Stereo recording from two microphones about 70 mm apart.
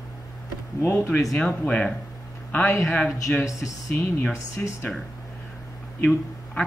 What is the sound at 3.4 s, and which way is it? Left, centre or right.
Speech, left.